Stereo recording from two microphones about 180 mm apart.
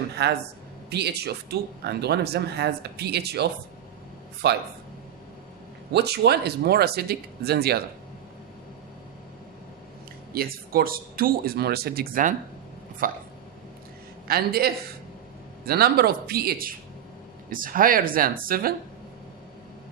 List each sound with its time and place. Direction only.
0.1 s a woman's voice: 65° right (ahead or behind)
5.9 s speech: 65° right (ahead or behind)
10.3 s speech: 55° right (ahead or behind)
14.3 s speech: 60° right (ahead or behind)